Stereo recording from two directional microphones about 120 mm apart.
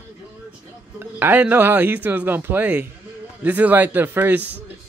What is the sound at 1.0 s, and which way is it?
A man's voice, 15° right (ahead or behind).